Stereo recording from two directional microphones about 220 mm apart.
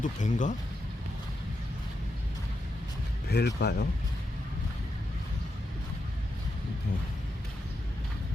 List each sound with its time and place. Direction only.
0.0 s speech: 35° left (ahead or behind)
3.2 s speech: 50° left (ahead or behind)